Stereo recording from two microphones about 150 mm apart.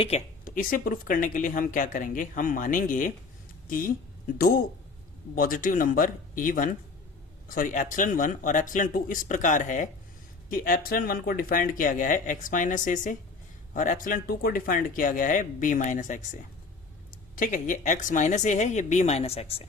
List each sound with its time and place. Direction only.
0.4 s a woman's voice: 65° left (ahead or behind)
10.5 s a woman's voice: 70° left (ahead or behind); by 19.6 s 40° left (ahead or behind)